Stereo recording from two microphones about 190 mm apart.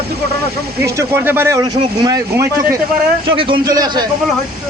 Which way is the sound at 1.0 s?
10° right (ahead or behind).